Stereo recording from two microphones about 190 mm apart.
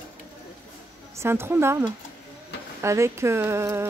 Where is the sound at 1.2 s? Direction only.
10° right (ahead or behind).